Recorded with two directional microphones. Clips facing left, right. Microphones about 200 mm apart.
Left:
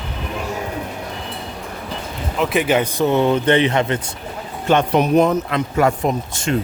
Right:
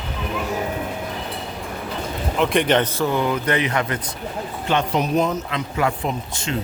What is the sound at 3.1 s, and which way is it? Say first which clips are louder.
Speech: left 6 dB; 25° left (ahead or behind).